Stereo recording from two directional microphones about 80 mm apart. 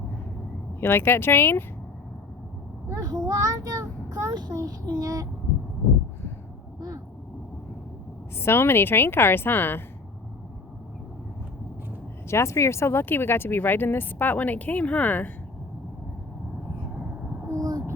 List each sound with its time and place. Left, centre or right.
0.8 s speech: left
2.9 s a child's voice: right
6.7 s a sound: right
8.4 s speech: left
12.3 s speech: left; by 15.3 s centre
17.5 s a sound: right